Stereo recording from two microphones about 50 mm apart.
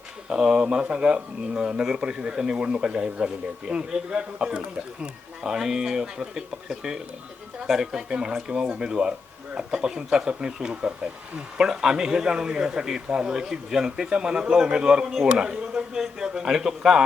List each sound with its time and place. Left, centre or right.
0.3 s speech: centre